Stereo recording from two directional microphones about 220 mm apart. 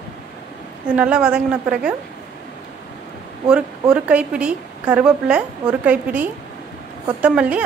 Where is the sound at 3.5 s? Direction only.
5° right (ahead or behind).